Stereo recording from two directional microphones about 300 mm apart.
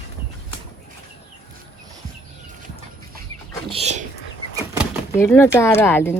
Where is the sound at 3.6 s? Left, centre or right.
Centre.